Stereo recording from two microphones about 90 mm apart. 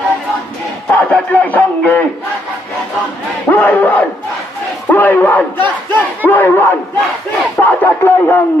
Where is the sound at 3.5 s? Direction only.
20° left (ahead or behind).